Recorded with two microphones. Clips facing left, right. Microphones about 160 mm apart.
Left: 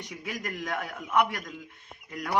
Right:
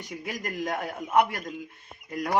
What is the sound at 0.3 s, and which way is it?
Speech, 35° right (ahead or behind).